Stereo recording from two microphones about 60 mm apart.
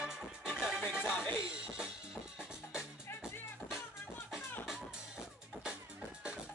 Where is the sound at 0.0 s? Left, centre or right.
Centre.